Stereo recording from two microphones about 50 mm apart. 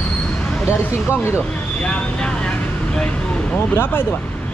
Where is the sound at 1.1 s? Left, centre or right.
Left.